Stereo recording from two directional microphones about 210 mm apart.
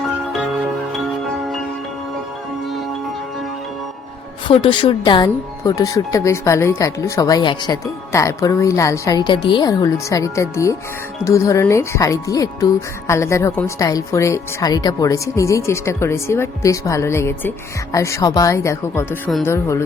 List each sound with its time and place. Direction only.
4.4 s speech: 25° left (ahead or behind)